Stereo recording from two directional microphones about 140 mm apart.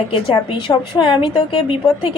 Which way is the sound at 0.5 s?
35° left (ahead or behind).